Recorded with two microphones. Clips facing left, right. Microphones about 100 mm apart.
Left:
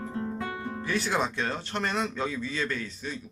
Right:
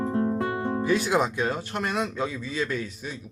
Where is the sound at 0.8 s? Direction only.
15° right (ahead or behind).